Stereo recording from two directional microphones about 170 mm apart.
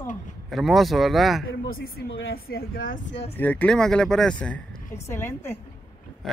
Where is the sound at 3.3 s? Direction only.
10° left (ahead or behind).